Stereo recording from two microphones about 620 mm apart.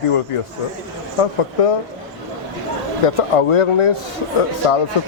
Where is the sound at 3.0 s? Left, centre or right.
Left.